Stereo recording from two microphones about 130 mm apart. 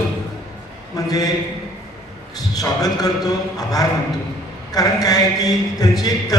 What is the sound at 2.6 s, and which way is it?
Speech, 30° left (ahead or behind).